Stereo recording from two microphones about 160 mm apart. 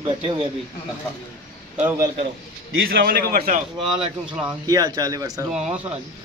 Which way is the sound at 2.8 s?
70° right (ahead or behind).